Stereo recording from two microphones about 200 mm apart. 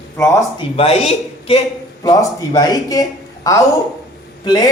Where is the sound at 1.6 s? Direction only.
15° left (ahead or behind).